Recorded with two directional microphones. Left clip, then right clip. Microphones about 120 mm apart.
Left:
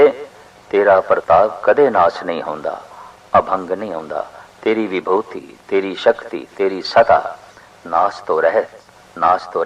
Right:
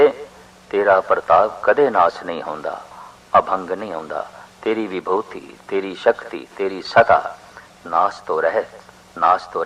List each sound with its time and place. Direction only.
0.0 s a sound: 25° left (ahead or behind)
0.7 s a man's voice: 25° left (ahead or behind)
9.1 s a man's voice: 20° left (ahead or behind)